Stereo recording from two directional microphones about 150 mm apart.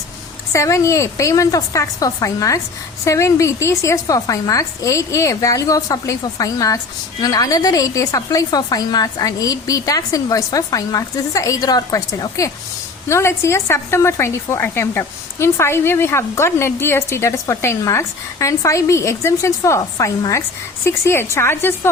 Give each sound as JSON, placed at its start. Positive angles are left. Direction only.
{"t": 0.5, "sound": "a woman's voice", "side_deg": 20}